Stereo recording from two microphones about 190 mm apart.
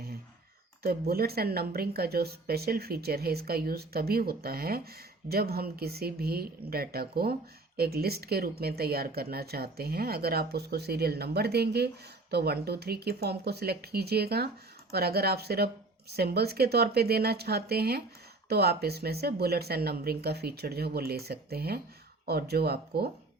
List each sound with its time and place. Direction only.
0.8 s speech: 55° right (ahead or behind)